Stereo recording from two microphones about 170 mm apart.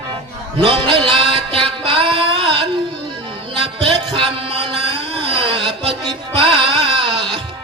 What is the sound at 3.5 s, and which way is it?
Music, 30° right (ahead or behind).